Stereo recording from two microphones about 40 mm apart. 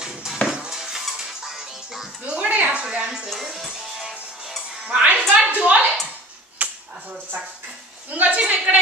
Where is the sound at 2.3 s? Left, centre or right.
Right.